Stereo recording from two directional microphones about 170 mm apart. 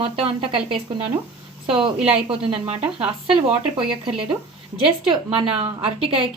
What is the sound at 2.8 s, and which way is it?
Speech, 5° right (ahead or behind).